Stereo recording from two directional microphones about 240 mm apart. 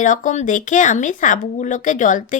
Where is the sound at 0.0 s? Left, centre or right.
Left.